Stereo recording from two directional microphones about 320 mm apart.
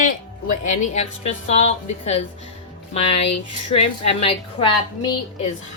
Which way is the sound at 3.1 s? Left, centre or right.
Left.